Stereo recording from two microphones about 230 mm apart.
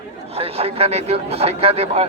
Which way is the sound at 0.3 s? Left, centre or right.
Right.